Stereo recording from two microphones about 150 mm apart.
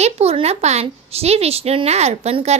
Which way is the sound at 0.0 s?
45° right (ahead or behind).